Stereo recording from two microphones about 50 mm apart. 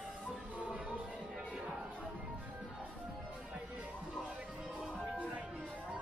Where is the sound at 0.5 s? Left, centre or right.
Right.